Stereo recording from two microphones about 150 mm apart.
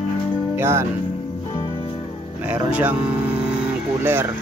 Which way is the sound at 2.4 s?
10° right (ahead or behind).